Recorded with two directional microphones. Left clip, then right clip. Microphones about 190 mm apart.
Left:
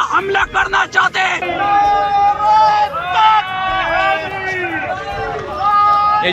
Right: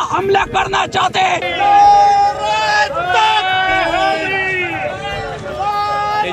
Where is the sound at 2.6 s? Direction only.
55° right (ahead or behind).